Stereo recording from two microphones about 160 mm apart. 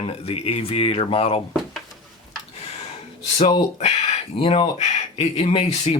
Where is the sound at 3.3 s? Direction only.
40° left (ahead or behind).